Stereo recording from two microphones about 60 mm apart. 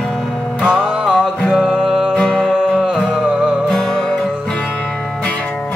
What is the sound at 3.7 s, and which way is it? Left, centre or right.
Music, centre.